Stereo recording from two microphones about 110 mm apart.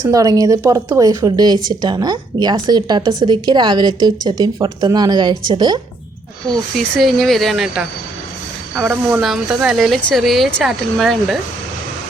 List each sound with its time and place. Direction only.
0.0 s speech: 30° right (ahead or behind)
6.7 s speech: centre (ahead or behind)